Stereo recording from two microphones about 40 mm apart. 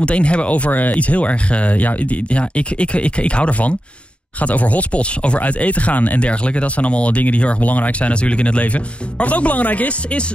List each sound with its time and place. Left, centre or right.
0.0 s speech: left
0.9 s speech: left